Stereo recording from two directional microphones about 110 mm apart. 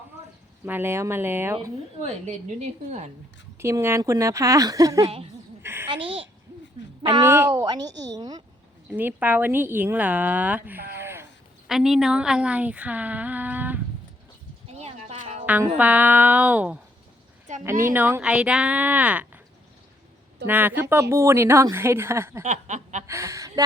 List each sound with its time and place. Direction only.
0.6 s a woman's voice: 20° right (ahead or behind)
2.0 s a woman's voice: 85° right
3.6 s a woman's voice: 25° right (ahead or behind)
5.6 s babbling: 20° right (ahead or behind)
7.3 s a woman's voice: 25° right (ahead or behind)
8.9 s a woman's voice: 15° right (ahead or behind)
11.7 s a woman's voice: 5° right (ahead or behind)
14.7 s music: 85° right
15.8 s a woman's voice: 15° right (ahead or behind)
20.5 s a woman's voice: 15° right (ahead or behind)
22.4 s a woman's voice: 90° right
23.0 s a woman's voice: 25° right (ahead or behind)